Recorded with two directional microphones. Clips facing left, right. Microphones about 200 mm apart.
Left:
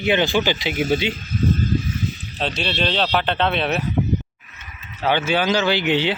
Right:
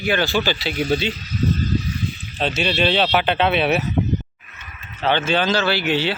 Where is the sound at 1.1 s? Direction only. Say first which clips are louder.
Left 1 dB; 50° left (ahead or behind).